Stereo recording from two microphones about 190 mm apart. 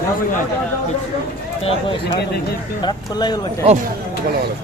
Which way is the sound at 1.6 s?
30° left (ahead or behind).